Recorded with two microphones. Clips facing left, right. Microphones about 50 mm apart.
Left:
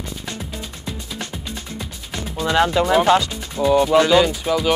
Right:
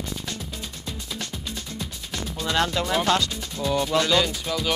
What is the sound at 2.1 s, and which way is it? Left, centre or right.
Speech, left.